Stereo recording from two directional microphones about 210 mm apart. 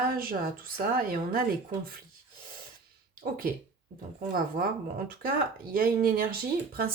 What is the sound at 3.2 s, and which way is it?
Speech, 45° right (ahead or behind).